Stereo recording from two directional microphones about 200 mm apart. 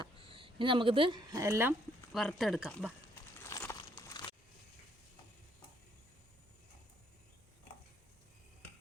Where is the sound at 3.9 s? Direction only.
20° left (ahead or behind).